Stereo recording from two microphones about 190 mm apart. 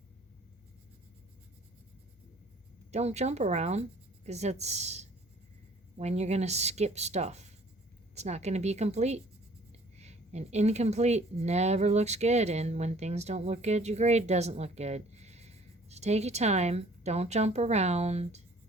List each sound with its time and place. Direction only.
2.9 s speech: 35° right (ahead or behind)